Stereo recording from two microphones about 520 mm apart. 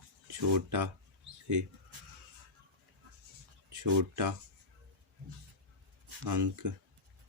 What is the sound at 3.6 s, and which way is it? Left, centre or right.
Speech, right.